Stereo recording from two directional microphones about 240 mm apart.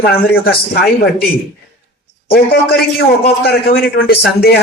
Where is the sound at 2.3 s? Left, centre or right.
Left.